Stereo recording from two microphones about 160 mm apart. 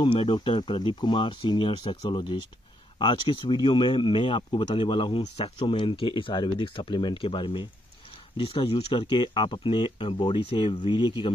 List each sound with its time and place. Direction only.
0.0 s speech: 30° left (ahead or behind)